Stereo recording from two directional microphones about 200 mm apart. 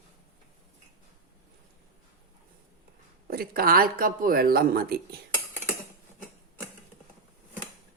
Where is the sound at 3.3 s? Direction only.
50° right (ahead or behind).